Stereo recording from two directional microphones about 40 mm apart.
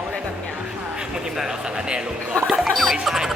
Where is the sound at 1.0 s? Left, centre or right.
Centre.